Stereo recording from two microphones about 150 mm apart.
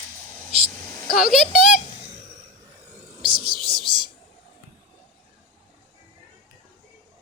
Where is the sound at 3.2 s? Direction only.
35° right (ahead or behind).